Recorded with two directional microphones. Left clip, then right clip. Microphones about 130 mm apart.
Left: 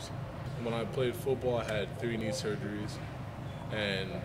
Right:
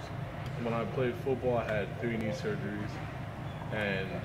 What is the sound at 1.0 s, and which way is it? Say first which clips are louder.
A man's voice: left 2 dB; 35° left (ahead or behind).